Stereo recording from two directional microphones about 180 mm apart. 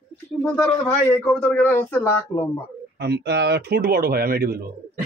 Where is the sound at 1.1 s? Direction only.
10° left (ahead or behind).